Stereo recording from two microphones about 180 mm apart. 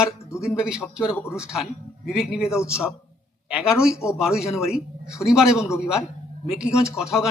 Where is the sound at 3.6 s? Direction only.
5° right (ahead or behind).